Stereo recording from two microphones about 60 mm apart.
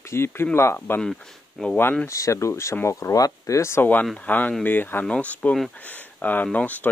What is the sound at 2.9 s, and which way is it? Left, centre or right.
Speech, left.